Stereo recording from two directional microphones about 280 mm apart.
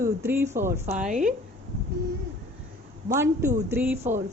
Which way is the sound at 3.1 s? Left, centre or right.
Centre.